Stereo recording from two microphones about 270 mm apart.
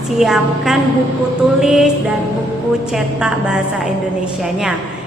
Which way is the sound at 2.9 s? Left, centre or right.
Centre.